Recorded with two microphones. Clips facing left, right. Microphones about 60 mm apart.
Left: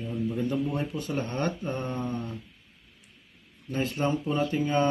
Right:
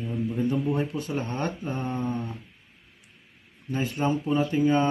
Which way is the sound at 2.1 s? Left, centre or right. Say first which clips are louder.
Right 1 dB; centre.